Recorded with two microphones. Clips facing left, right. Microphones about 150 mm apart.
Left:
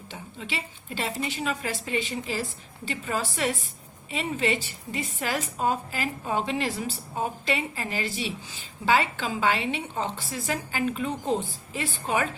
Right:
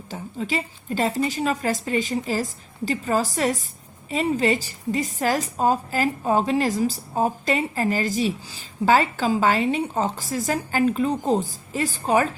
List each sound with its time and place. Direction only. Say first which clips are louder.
0.1 s a woman's voice: right 9 dB; 40° right (ahead or behind)